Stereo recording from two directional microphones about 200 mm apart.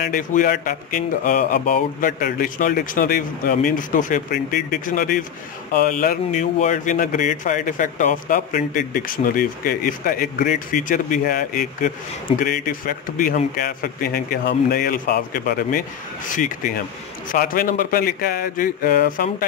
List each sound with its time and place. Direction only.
0.0 s speech: 40° left (ahead or behind)